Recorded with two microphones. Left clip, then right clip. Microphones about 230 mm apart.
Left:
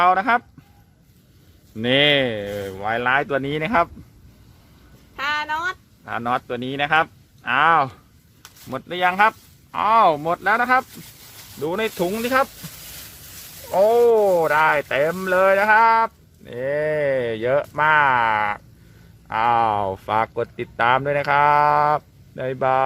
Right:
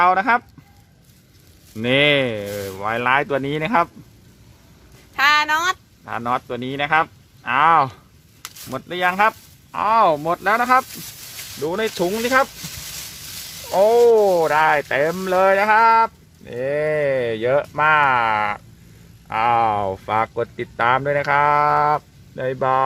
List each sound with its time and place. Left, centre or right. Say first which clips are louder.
0.0 s speech: right 1 dB; centre
1.7 s speech: right 1 dB; centre
5.1 s speech: right 8 dB; right
6.1 s speech: even; centre
13.7 s speech: right 2 dB; centre